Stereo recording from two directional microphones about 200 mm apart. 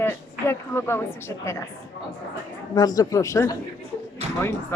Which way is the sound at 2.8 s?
20° left (ahead or behind).